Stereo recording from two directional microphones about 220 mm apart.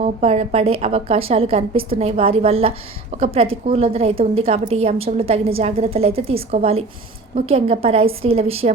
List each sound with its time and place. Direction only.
0.0 s a woman's voice: 30° right (ahead or behind)